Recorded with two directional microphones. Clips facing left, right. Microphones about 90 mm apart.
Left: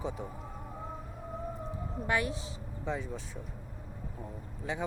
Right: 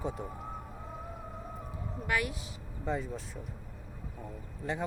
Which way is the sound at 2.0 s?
25° left (ahead or behind).